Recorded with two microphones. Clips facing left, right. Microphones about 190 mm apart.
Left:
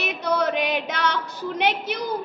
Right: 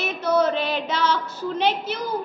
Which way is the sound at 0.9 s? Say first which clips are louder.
Right 2 dB; 65° left (ahead or behind).